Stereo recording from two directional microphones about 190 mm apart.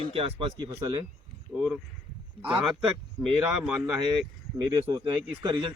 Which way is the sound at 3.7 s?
5° right (ahead or behind).